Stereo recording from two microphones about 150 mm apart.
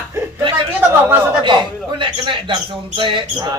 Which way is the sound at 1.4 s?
30° right (ahead or behind).